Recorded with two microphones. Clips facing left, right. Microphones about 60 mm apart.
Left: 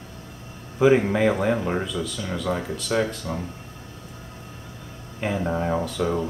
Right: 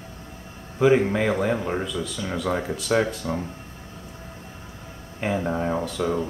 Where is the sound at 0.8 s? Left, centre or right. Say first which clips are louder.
Left 1 dB; centre.